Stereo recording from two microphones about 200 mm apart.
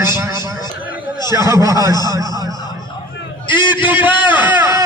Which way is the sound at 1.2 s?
15° right (ahead or behind).